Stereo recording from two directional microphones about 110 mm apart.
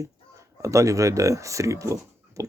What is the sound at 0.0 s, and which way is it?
Speech, 30° right (ahead or behind).